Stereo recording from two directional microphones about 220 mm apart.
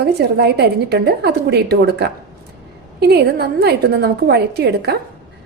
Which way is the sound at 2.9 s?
45° right (ahead or behind).